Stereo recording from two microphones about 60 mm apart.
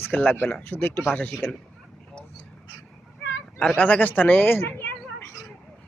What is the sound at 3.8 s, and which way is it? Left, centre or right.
Speech, left.